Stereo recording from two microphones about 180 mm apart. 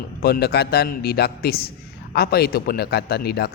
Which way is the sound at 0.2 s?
60° left (ahead or behind).